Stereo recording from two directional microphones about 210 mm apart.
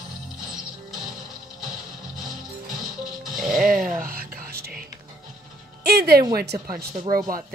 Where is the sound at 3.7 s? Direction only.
40° right (ahead or behind).